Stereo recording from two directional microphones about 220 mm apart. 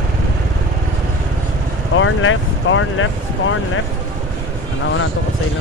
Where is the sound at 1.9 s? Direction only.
65° left (ahead or behind).